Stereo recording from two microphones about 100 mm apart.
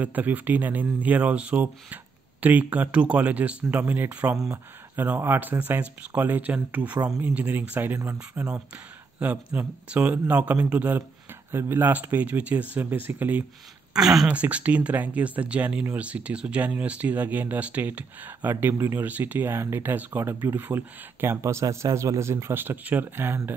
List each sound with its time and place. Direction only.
0.0 s speech: 15° right (ahead or behind)
13.9 s speech: 5° right (ahead or behind); by 23.5 s 20° right (ahead or behind)